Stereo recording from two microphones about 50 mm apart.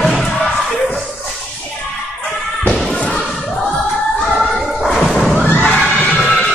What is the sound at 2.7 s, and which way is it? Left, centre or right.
Thump, centre.